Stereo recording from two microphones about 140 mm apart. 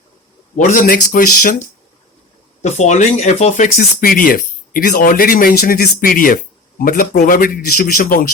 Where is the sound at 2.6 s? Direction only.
55° left (ahead or behind).